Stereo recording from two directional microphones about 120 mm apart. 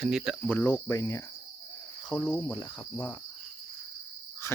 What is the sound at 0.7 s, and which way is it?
Cricket, 25° left (ahead or behind).